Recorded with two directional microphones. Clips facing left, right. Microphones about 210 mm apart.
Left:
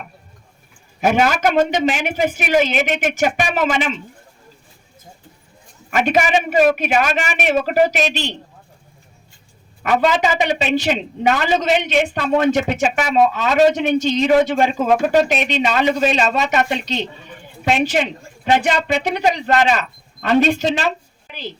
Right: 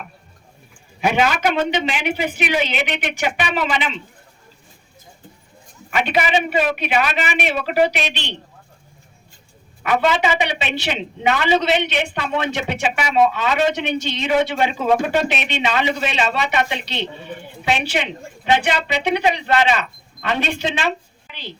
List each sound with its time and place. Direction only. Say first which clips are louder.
1.0 s a woman's voice: left 2 dB; 45° left (ahead or behind)
5.9 s a woman's voice: left 3 dB; 45° left (ahead or behind)
10.1 s a woman's voice: left 2 dB; 40° left (ahead or behind)